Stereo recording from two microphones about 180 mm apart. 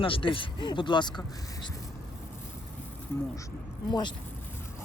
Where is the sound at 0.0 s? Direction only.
30° left (ahead or behind).